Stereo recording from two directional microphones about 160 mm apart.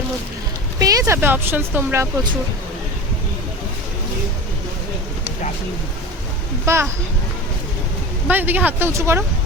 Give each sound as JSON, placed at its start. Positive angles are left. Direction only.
{"t": 0.8, "sound": "speech", "side_deg": -20}
{"t": 6.7, "sound": "a child's voice", "side_deg": -20}
{"t": 8.3, "sound": "speech", "side_deg": -10}